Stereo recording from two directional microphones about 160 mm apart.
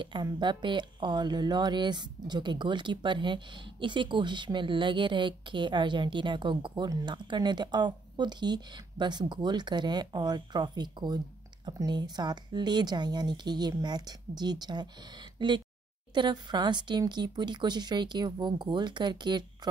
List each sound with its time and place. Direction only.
0.0 s speech: 30° right (ahead or behind)